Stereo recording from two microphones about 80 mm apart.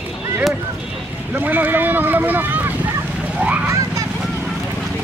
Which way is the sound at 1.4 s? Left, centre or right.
Right.